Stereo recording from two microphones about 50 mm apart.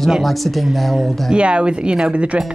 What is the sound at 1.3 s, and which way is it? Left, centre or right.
Speech, right.